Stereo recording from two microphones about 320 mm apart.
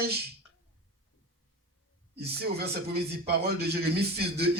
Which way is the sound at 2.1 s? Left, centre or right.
Right.